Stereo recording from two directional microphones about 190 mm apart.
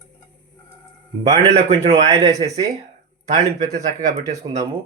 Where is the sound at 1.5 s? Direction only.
30° right (ahead or behind).